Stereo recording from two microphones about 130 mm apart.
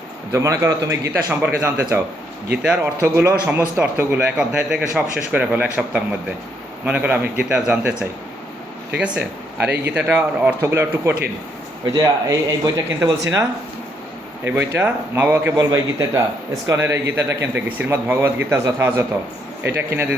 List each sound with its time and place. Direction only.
0.3 s a man's voice: 25° right (ahead or behind); by 7.9 s 10° right (ahead or behind)
9.0 s speech: 10° right (ahead or behind)
11.9 s a man's voice: 25° right (ahead or behind)
15.5 s a man's voice: 25° right (ahead or behind)